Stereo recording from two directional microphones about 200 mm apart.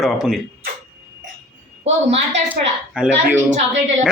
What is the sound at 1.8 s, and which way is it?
Speech, 35° right (ahead or behind).